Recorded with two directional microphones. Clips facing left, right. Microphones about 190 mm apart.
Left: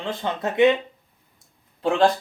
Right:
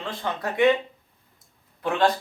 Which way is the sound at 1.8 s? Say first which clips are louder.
Left 3 dB; 30° left (ahead or behind).